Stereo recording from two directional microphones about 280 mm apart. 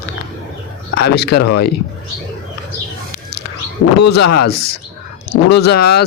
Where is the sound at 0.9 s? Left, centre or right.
Left.